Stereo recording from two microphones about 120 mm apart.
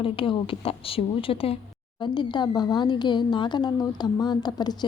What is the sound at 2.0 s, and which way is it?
A woman's voice, 40° left (ahead or behind).